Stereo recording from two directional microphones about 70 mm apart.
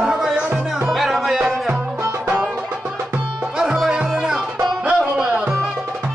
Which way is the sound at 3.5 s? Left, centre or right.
Centre.